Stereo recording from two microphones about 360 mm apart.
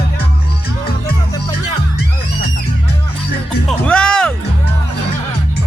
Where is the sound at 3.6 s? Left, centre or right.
Centre.